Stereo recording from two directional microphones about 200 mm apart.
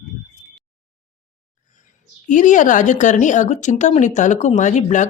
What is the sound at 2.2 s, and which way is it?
Speech, 40° left (ahead or behind).